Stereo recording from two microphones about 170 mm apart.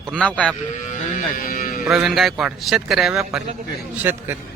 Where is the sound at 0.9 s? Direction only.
55° left (ahead or behind).